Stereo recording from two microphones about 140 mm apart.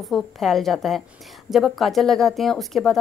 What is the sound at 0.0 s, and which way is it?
Speech, centre (ahead or behind).